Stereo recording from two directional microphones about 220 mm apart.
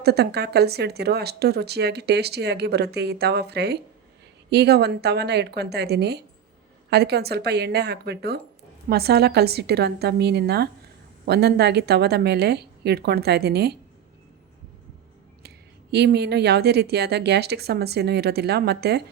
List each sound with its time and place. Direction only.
0.0 s speech: 45° right (ahead or behind)
15.4 s speech: 50° right (ahead or behind)